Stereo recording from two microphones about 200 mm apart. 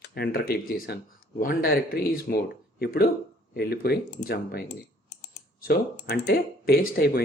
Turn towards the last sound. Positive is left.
turn(degrees=50)  # may be behind; listen again after turning